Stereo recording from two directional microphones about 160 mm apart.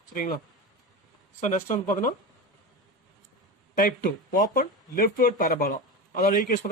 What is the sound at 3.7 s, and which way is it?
Speech, 65° left (ahead or behind).